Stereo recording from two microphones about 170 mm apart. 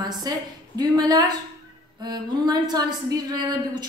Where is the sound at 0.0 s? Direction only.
25° right (ahead or behind).